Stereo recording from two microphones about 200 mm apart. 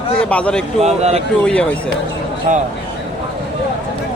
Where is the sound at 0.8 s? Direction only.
35° right (ahead or behind).